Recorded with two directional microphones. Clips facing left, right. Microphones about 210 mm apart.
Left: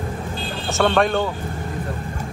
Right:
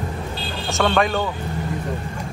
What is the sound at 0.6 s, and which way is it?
Speech, centre (ahead or behind).